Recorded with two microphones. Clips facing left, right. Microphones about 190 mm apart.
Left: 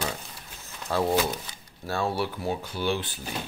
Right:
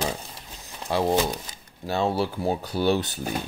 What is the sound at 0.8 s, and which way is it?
Speech, 15° right (ahead or behind).